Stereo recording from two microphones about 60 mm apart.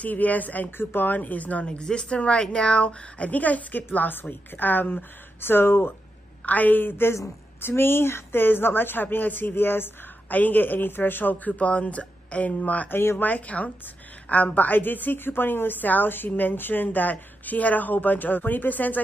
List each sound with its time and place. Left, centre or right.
0.0 s speech: left
6.4 s a woman's voice: left